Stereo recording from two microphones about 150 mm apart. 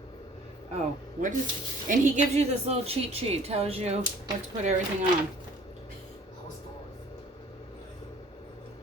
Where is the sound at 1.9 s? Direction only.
50° right (ahead or behind).